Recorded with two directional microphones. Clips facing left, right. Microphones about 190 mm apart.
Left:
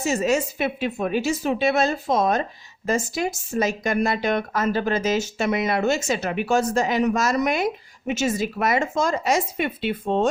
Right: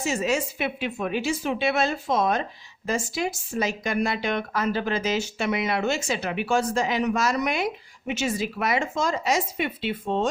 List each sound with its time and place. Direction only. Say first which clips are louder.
0.0 s speech: left 4 dB; 45° left (ahead or behind)